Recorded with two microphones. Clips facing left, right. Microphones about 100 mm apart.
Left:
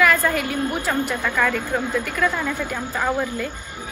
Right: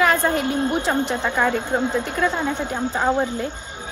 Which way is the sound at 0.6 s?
30° right (ahead or behind).